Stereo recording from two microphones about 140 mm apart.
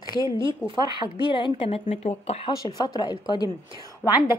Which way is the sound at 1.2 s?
35° left (ahead or behind).